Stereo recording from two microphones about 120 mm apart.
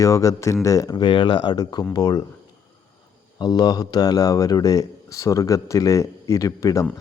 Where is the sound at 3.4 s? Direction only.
35° left (ahead or behind).